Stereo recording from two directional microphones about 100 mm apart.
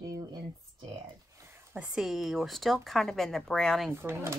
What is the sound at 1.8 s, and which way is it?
Speech, 5° right (ahead or behind).